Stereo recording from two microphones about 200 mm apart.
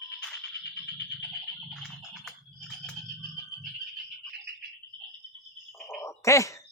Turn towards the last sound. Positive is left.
turn(degrees=15)  # may be behind; listen again after turning